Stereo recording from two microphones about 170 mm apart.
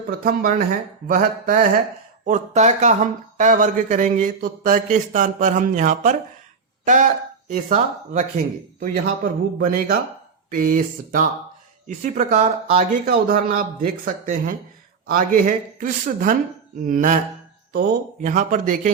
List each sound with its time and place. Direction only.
0.1 s speech: 55° right (ahead or behind)
2.2 s speech: 45° right (ahead or behind)
9.2 s speech: 55° right (ahead or behind)
11.9 s speech: 45° right (ahead or behind)
13.1 s speech: 60° right (ahead or behind)
18.2 s speech: 50° right (ahead or behind)